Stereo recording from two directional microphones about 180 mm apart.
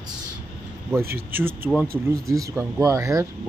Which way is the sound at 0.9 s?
10° right (ahead or behind).